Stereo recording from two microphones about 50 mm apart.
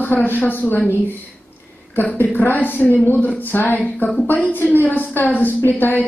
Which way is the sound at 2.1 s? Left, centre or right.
Left.